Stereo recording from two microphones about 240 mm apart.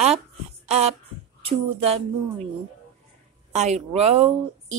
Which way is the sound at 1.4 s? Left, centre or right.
Right.